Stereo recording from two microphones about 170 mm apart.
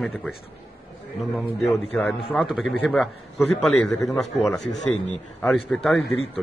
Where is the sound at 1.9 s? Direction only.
5° left (ahead or behind).